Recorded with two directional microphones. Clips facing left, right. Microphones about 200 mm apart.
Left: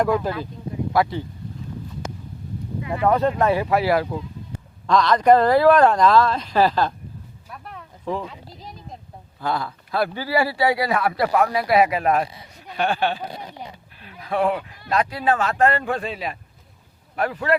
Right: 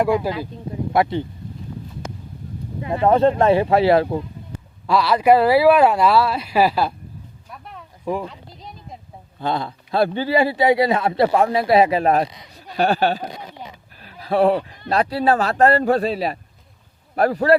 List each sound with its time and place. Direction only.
0.0 s speech: 10° right (ahead or behind)
2.8 s speech: 30° right (ahead or behind)
4.0 s speech: 50° right (ahead or behind)
4.9 s speech: 10° right (ahead or behind)
7.4 s a sound: centre (ahead or behind)
8.0 s speech: 10° right (ahead or behind)
8.3 s a sound: centre (ahead or behind)
9.4 s speech: 25° right (ahead or behind)